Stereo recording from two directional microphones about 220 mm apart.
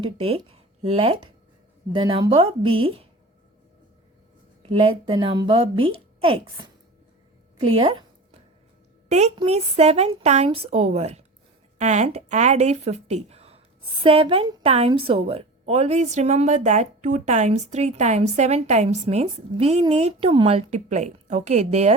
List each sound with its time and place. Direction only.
0.0 s a woman's voice: 25° right (ahead or behind)
4.7 s a woman's voice: 25° right (ahead or behind)
7.6 s a sound: 25° right (ahead or behind)
9.0 s a woman's voice: 30° right (ahead or behind)